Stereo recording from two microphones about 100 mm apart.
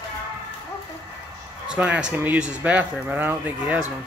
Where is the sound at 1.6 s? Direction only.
10° right (ahead or behind).